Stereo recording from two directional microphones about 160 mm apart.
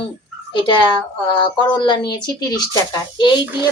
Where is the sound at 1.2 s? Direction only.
30° left (ahead or behind).